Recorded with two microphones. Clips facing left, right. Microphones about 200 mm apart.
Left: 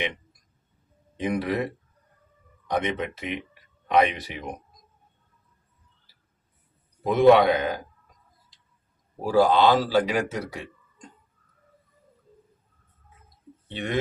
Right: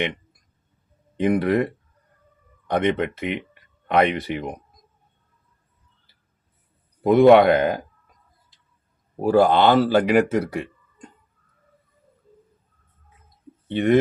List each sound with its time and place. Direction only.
1.1 s speech: 60° right (ahead or behind)
2.6 s speech: 60° right (ahead or behind)
7.0 s speech: 55° right (ahead or behind)
9.2 s speech: 60° right (ahead or behind)
13.7 s speech: 55° right (ahead or behind)